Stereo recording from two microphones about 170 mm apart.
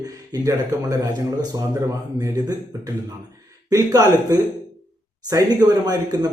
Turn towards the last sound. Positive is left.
turn(degrees=-25)  # may be behind; listen again after turning